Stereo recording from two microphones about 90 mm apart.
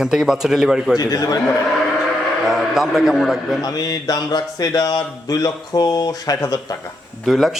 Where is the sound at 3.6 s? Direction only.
45° left (ahead or behind).